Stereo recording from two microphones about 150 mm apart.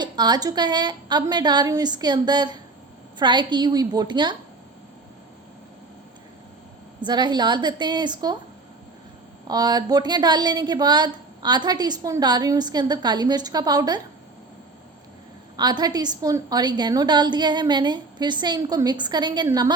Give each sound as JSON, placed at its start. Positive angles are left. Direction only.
{"t": 0.0, "sound": "a woman's voice", "side_deg": -30}
{"t": 7.0, "sound": "a woman's voice", "side_deg": -30}
{"t": 9.5, "sound": "a woman's voice", "side_deg": -25}
{"t": 15.5, "sound": "a woman's voice", "side_deg": -25}